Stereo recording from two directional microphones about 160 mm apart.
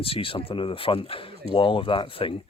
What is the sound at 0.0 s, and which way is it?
Speech, 35° left (ahead or behind).